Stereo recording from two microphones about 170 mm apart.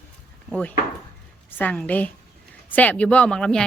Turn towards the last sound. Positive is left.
turn(degrees=5)  # may be behind; listen again after turning